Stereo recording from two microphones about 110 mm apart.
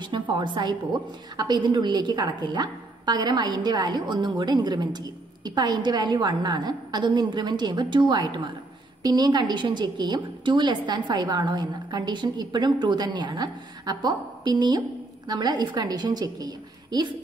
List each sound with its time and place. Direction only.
0.0 s a woman's voice: 45° right (ahead or behind)